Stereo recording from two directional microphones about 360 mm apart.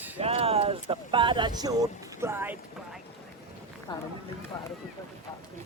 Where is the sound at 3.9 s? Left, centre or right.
Centre.